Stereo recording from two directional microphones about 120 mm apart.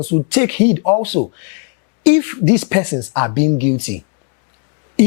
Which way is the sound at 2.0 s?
15° left (ahead or behind).